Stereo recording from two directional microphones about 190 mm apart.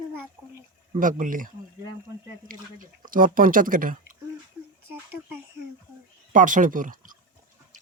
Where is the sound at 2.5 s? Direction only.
45° right (ahead or behind).